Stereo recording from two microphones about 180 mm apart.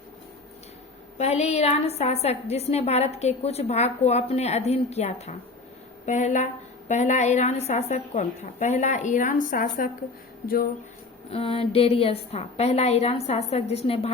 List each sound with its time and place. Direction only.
1.2 s a woman's voice: 35° left (ahead or behind); by 10.7 s 55° left (ahead or behind)
11.3 s a woman's voice: 30° left (ahead or behind)